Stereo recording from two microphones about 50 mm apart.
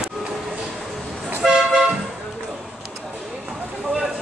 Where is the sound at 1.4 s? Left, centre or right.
Centre.